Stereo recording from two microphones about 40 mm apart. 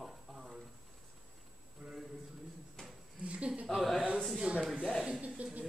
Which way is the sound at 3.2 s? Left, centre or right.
Right.